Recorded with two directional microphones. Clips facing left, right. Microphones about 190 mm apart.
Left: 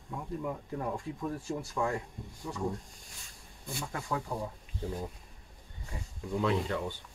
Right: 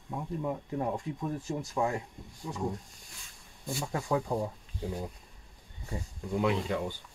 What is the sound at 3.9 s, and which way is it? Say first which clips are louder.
Speech: right 5 dB; 25° right (ahead or behind).